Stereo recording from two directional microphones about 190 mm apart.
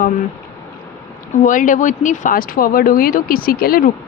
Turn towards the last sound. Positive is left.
turn(degrees=50)  # may be behind; listen again after turning